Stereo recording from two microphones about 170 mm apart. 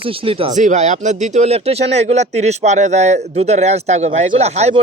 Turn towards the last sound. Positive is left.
turn(degrees=-40)  # may be behind; listen again after turning